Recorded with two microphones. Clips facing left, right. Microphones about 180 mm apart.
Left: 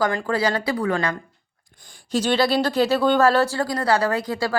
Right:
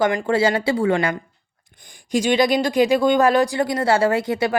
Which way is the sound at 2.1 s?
15° right (ahead or behind).